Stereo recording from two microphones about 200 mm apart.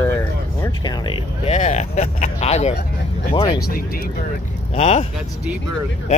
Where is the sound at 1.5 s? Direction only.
35° left (ahead or behind).